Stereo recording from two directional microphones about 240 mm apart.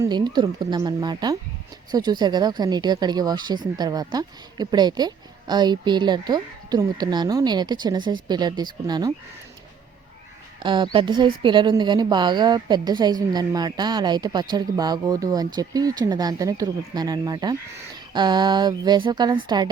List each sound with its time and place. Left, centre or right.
0.0 s a woman's voice: centre
10.6 s a woman's voice: centre